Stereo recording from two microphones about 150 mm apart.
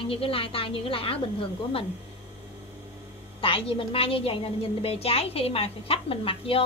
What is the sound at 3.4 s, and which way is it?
A woman's voice, 35° left (ahead or behind).